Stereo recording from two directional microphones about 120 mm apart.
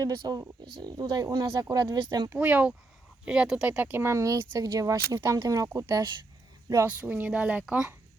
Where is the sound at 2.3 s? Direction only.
10° right (ahead or behind); by 6.1 s 30° right (ahead or behind).